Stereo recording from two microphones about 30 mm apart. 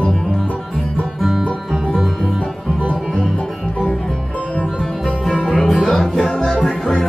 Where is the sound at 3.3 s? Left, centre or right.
Left.